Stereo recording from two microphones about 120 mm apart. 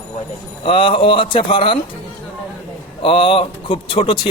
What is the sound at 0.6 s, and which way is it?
Speech, 45° left (ahead or behind).